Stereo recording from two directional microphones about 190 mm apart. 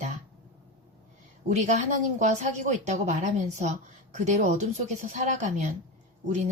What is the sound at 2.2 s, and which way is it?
Speech, 40° right (ahead or behind).